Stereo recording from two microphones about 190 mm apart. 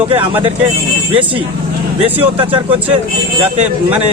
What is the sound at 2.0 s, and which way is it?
Speech, 30° right (ahead or behind).